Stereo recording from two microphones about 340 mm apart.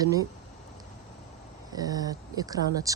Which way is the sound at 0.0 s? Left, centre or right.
Centre.